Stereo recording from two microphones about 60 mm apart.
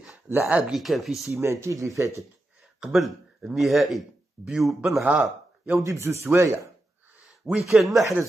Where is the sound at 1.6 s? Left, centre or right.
Right.